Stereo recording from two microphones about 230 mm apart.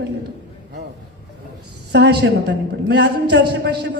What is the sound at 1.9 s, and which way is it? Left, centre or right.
A woman's voice, right.